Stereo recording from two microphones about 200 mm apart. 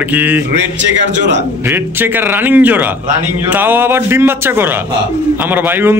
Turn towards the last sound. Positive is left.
turn(degrees=-10)  # may be behind; listen again after turning